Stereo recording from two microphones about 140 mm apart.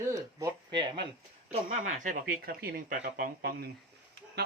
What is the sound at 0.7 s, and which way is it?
Speech, 35° right (ahead or behind).